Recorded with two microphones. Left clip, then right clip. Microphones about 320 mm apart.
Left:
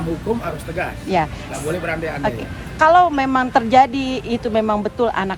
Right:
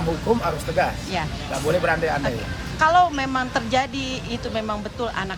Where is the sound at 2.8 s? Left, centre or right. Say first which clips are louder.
Left 5 dB; centre.